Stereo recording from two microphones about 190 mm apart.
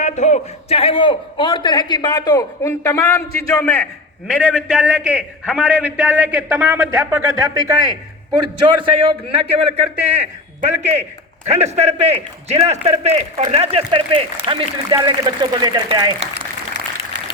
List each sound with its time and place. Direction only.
0.0 s a man's voice: 40° left (ahead or behind); by 3.8 s 10° left (ahead or behind)
4.3 s a man's voice: centre (ahead or behind); by 16.1 s 20° right (ahead or behind)